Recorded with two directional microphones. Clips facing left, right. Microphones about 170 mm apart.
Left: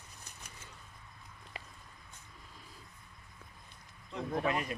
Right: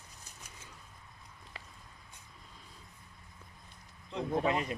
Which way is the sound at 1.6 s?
15° left (ahead or behind).